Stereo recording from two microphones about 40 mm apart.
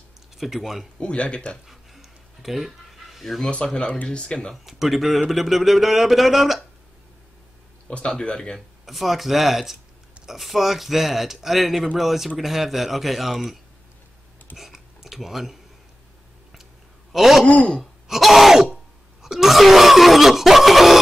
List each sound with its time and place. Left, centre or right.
0.4 s throat clearing: centre
0.9 s speech: left
1.7 s a sound: centre
4.1 s speech: left
4.6 s throat clearing: centre
7.9 s speech: left
8.5 s throat clearing: centre
10.2 s speech: centre
12.0 s throat clearing: centre
14.6 s a sound: centre
17.1 s throat clearing: centre